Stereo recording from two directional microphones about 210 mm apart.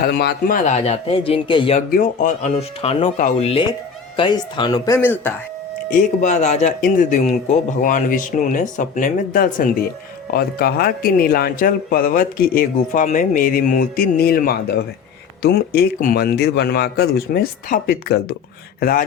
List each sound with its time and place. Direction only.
0.0 s a man's voice: 50° left (ahead or behind); by 1.8 s 25° left (ahead or behind)
1.9 s speech: 40° left (ahead or behind); by 5.3 s 10° left (ahead or behind)
5.9 s a man's voice: 35° left (ahead or behind)